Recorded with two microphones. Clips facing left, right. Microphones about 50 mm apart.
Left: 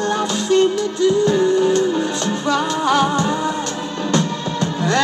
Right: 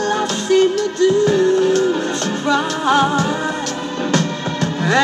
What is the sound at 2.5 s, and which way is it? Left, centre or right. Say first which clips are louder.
Music: right 2 dB; centre.